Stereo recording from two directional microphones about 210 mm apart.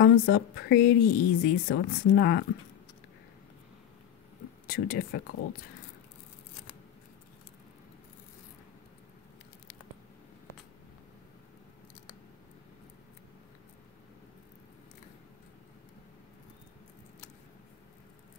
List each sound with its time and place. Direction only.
0.0 s a woman's voice: 45° left (ahead or behind)
4.6 s a woman's voice: 45° left (ahead or behind)